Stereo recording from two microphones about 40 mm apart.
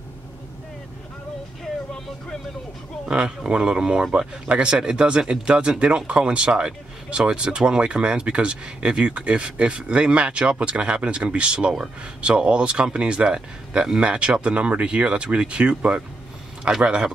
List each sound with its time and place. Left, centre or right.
3.1 s speech: right
16.8 s speech: right